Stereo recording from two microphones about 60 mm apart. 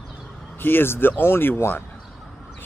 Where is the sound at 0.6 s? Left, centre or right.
Left.